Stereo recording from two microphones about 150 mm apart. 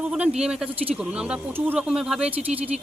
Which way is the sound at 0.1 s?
5° right (ahead or behind).